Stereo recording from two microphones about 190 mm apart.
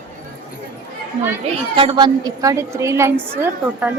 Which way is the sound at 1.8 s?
25° right (ahead or behind).